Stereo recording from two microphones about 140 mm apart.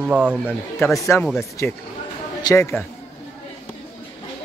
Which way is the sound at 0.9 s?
20° left (ahead or behind).